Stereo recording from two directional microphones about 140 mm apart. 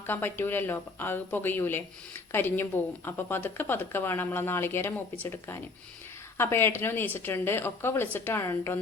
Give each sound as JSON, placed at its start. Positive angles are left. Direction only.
{"t": 0.1, "sound": "a woman's voice", "side_deg": 15}